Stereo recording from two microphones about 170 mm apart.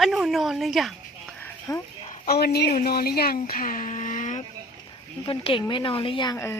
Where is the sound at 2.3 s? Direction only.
70° left (ahead or behind); by 4.4 s 45° left (ahead or behind).